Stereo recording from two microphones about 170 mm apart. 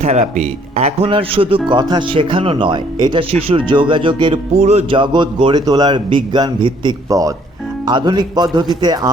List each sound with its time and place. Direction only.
0.0 s speech: 40° right (ahead or behind); by 9.0 s 25° right (ahead or behind)